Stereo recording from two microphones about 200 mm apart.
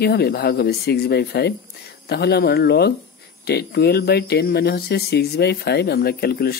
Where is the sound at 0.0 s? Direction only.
55° left (ahead or behind).